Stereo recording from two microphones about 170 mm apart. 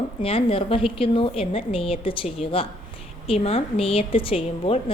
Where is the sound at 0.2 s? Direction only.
35° left (ahead or behind).